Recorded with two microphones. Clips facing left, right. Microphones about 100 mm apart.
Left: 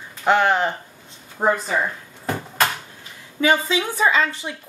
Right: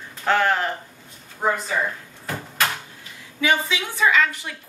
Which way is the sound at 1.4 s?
40° left (ahead or behind).